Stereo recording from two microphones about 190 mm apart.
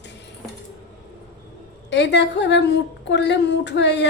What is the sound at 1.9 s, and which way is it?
A woman's voice, 65° left (ahead or behind).